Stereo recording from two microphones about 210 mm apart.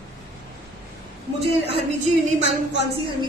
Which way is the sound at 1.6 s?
30° right (ahead or behind).